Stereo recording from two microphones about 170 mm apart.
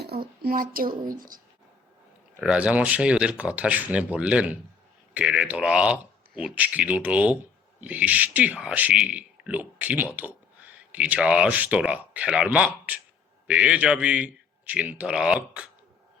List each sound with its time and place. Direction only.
0.4 s a woman's voice: 55° right (ahead or behind)
2.4 s speech: 5° right (ahead or behind)